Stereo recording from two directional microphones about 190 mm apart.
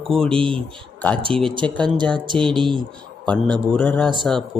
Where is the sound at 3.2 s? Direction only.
5° left (ahead or behind).